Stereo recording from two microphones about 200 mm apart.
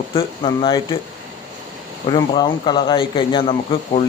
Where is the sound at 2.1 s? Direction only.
25° left (ahead or behind).